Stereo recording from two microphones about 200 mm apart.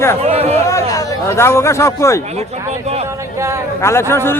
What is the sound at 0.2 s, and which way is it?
Speech, 30° right (ahead or behind).